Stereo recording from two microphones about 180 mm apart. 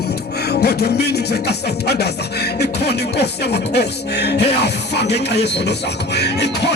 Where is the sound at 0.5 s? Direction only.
65° left (ahead or behind).